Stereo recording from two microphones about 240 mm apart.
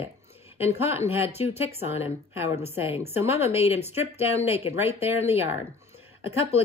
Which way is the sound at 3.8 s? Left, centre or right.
Centre.